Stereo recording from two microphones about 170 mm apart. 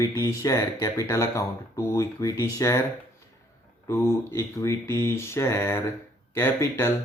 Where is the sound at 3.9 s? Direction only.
15° left (ahead or behind).